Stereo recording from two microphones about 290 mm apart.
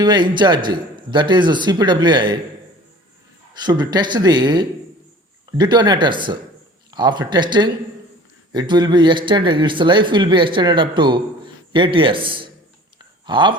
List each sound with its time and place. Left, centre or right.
0.0 s a man's voice: centre
3.6 s a man's voice: centre